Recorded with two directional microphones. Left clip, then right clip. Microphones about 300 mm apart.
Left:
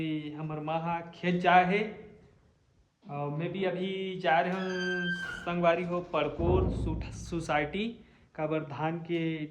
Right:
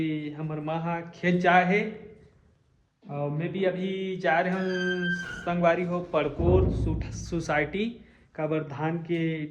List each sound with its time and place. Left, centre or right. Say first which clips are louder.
0.0 s music: right 4 dB; centre
3.1 s music: right 3 dB; centre